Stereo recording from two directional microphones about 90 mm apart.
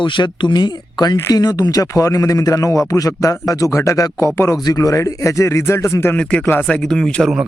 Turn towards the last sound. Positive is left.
turn(degrees=5)  # may be behind; listen again after turning